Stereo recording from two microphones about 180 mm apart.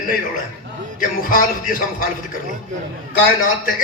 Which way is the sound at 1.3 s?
50° left (ahead or behind).